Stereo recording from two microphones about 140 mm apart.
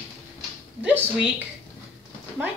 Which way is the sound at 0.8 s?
10° right (ahead or behind).